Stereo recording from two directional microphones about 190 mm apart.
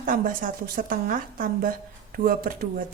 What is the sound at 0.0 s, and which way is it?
A woman's voice, 45° right (ahead or behind).